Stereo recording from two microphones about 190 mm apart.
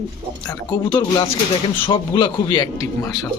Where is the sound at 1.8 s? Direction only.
25° left (ahead or behind).